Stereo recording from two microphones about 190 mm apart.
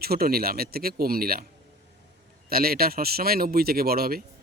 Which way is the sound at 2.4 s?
55° right (ahead or behind).